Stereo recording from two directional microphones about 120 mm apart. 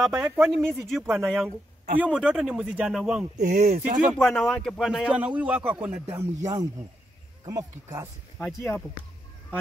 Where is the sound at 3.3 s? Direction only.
85° right.